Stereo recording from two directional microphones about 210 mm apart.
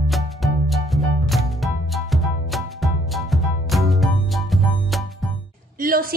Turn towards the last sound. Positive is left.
turn(degrees=-45)  # may be behind; listen again after turning